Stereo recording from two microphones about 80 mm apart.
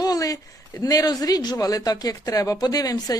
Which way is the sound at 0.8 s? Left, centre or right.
Left.